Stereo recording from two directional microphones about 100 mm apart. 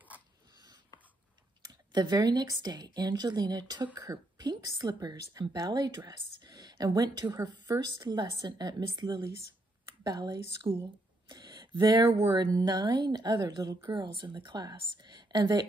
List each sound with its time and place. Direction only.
1.6 s a woman's voice: 45° right (ahead or behind)
11.2 s a sound: 45° right (ahead or behind)
12.3 s a woman's voice: 45° right (ahead or behind)